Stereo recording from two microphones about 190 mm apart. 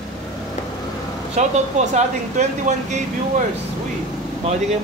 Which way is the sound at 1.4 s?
35° right (ahead or behind).